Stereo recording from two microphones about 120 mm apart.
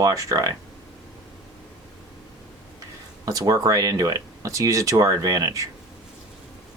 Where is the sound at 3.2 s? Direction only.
30° right (ahead or behind).